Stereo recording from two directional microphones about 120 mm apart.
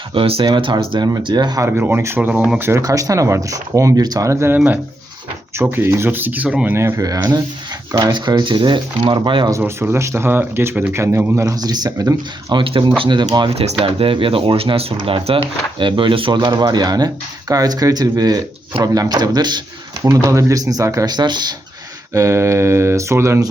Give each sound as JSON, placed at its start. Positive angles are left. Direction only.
{"t": 0.1, "sound": "speech", "side_deg": -50}
{"t": 1.6, "sound": "speech", "side_deg": -15}
{"t": 2.6, "sound": "speech", "side_deg": -20}
{"t": 9.5, "sound": "speech", "side_deg": -20}
{"t": 11.4, "sound": "speech", "side_deg": -35}
{"t": 12.6, "sound": "speech", "side_deg": -45}
{"t": 13.5, "sound": "speech", "side_deg": -55}
{"t": 22.1, "sound": "speech", "side_deg": -25}